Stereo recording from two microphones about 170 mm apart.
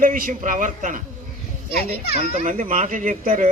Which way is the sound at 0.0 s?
50° right (ahead or behind).